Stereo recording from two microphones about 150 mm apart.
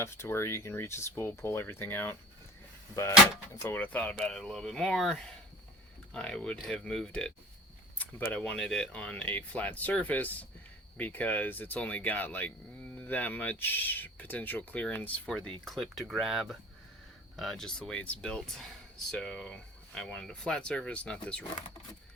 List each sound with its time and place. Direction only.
0.0 s speech: 15° left (ahead or behind)
3.8 s speech: 10° left (ahead or behind)